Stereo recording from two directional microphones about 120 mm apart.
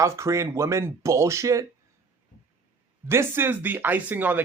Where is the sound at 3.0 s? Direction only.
20° right (ahead or behind).